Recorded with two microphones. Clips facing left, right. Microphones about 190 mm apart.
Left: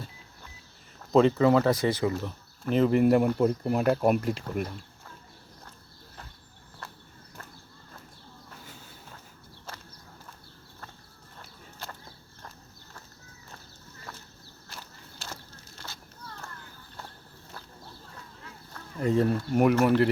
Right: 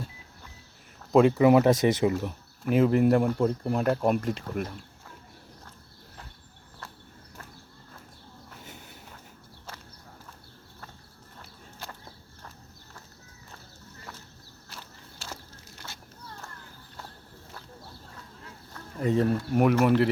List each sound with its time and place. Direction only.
1.1 s speech: 10° right (ahead or behind)
8.6 s walk: 20° right (ahead or behind)
18.7 s a sound: centre (ahead or behind)